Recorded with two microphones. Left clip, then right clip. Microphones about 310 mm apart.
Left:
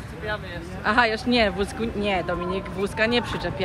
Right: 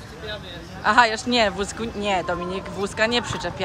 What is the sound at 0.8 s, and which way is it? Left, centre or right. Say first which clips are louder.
Speech: right 3 dB; centre.